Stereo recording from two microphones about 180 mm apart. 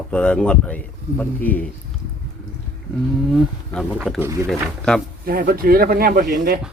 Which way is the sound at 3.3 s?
Centre (ahead or behind).